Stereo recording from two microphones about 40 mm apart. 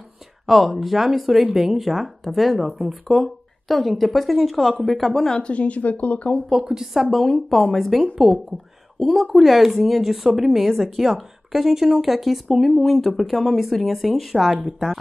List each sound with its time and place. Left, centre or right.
0.5 s speech: centre
5.3 s speech: left
6.5 s speech: centre